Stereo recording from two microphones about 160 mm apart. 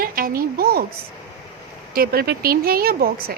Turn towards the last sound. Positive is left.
turn(degrees=-70)  # may be behind; listen again after turning